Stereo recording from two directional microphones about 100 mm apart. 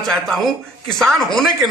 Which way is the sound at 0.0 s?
Centre (ahead or behind).